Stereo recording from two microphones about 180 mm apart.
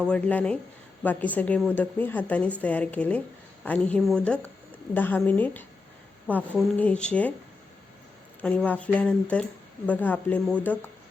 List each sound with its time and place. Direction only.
0.1 s speech: 5° left (ahead or behind)
8.4 s speech: 10° left (ahead or behind)